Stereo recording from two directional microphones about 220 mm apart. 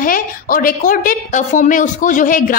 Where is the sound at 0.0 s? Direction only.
40° left (ahead or behind).